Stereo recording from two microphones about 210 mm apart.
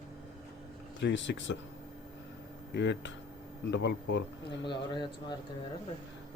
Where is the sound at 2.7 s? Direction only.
55° left (ahead or behind).